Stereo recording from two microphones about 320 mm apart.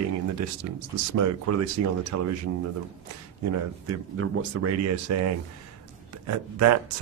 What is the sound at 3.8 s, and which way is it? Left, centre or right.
Speech, right.